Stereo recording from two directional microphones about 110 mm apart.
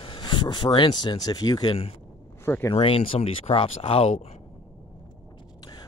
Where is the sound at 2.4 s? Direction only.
25° left (ahead or behind).